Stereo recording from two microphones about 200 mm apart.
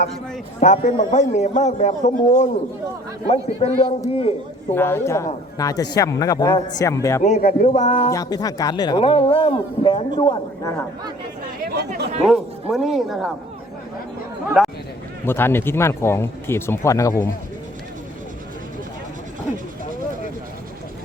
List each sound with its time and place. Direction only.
0.6 s a man's voice: 40° left (ahead or behind)
4.7 s speech: 10° left (ahead or behind)
7.2 s a man's voice: 35° left (ahead or behind)
8.1 s speech: 15° left (ahead or behind)
11.6 s speech: 55° right (ahead or behind)
12.2 s speech: centre (ahead or behind)
14.6 s a sound: 5° right (ahead or behind)
15.3 s speech: 10° left (ahead or behind)